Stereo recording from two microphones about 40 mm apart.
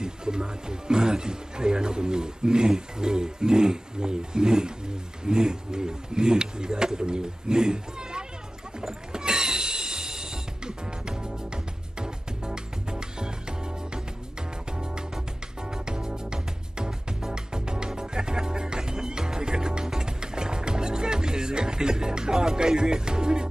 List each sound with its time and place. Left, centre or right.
0.0 s a man's voice: centre
8.8 s music: centre